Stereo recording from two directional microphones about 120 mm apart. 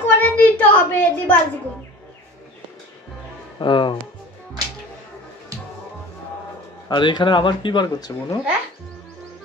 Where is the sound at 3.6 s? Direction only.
40° left (ahead or behind).